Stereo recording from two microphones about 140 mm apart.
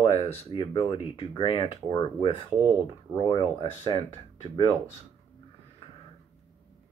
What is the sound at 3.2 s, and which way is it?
Speech, 35° left (ahead or behind).